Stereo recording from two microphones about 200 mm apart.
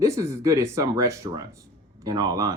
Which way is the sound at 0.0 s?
15° right (ahead or behind).